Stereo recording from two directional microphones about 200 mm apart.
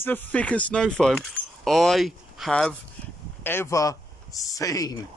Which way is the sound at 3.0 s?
5° left (ahead or behind).